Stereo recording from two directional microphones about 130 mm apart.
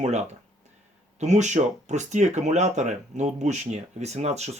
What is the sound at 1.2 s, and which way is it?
Speech, 60° right (ahead or behind).